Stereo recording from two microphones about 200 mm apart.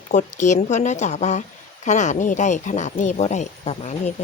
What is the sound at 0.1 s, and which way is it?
Speech, 40° left (ahead or behind).